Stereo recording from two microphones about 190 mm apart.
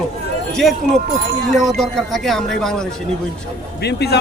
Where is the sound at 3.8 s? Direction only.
60° left (ahead or behind).